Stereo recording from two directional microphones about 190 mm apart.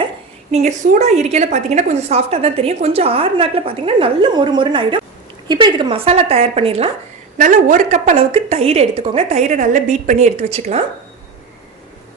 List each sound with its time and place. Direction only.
0.5 s a woman's voice: 35° right (ahead or behind)
7.3 s a woman's voice: 40° right (ahead or behind)